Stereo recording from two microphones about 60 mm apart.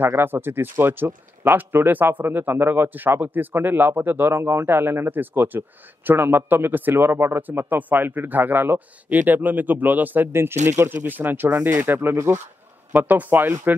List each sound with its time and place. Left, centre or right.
0.0 s a man's voice: right
10.9 s a man's voice: right
12.9 s a man's voice: right